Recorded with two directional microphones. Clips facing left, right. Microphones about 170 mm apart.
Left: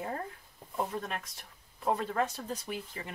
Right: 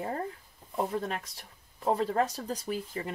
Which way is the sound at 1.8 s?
35° right (ahead or behind).